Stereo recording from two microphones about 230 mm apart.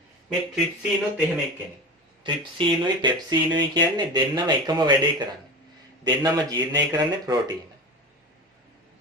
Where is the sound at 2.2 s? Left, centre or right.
Right.